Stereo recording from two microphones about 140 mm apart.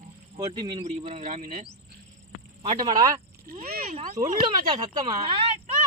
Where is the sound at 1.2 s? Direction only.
60° right (ahead or behind).